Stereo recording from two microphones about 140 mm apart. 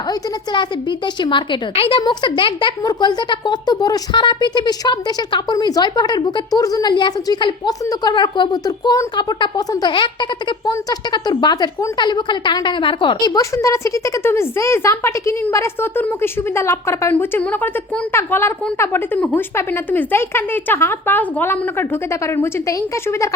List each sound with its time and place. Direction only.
0.1 s a woman's voice: 35° left (ahead or behind)